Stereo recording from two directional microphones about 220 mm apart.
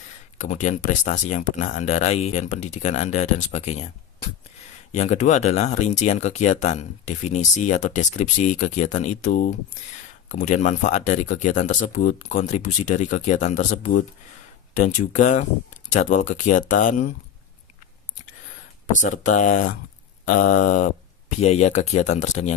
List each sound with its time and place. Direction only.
0.4 s speech: 35° left (ahead or behind)
4.9 s speech: 30° left (ahead or behind)
18.9 s speech: 35° left (ahead or behind)